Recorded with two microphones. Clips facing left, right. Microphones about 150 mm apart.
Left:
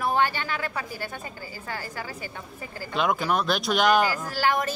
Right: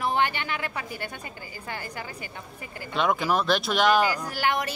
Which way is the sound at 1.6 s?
20° right (ahead or behind).